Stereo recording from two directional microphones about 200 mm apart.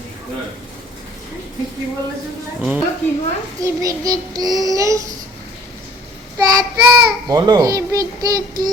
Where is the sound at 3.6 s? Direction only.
15° right (ahead or behind).